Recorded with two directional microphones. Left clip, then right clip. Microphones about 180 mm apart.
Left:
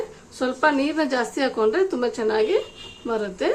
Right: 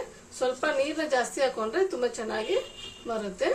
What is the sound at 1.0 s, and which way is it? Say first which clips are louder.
A woman's voice: left 3 dB; 40° left (ahead or behind).